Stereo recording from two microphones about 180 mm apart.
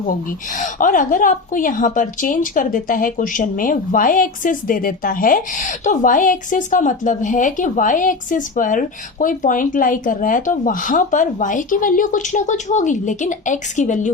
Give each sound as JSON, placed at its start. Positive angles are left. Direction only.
{"t": 0.5, "sound": "a woman's voice", "side_deg": 45}